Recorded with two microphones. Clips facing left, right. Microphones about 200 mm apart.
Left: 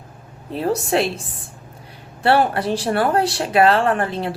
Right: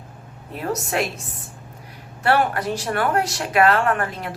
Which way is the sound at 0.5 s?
30° left (ahead or behind).